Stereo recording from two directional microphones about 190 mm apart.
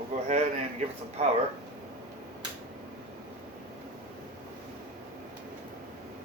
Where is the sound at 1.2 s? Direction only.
35° right (ahead or behind).